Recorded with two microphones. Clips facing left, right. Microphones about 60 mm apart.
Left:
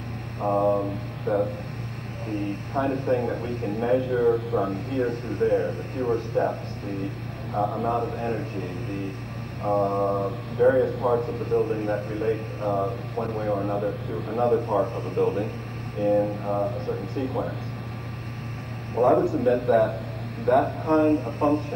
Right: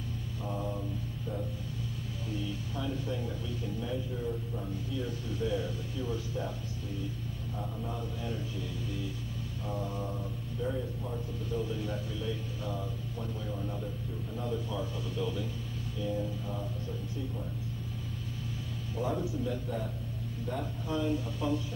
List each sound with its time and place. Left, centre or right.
0.4 s a sound: left
2.2 s a man's voice: left
18.9 s a man's voice: left